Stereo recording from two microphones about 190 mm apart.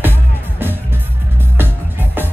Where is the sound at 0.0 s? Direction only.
10° right (ahead or behind).